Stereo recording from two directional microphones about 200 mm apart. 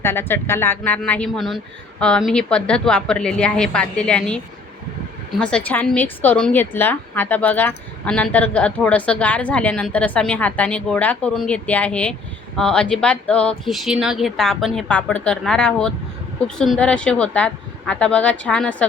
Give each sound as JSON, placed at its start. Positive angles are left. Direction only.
{"t": 0.0, "sound": "a woman's voice", "side_deg": 10}
{"t": 5.4, "sound": "a woman's voice", "side_deg": 5}